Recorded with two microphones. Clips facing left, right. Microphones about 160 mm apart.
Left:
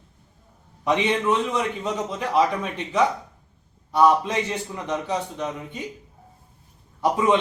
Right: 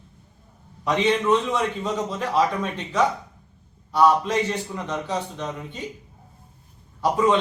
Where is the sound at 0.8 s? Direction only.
15° left (ahead or behind).